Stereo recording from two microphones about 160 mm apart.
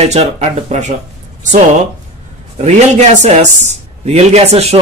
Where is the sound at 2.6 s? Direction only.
45° right (ahead or behind).